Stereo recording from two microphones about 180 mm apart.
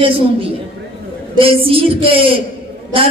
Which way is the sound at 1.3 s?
30° right (ahead or behind).